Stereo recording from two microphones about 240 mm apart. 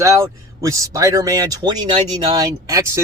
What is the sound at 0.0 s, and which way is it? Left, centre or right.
Speech, centre.